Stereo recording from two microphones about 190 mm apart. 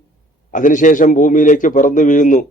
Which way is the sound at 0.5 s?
40° left (ahead or behind).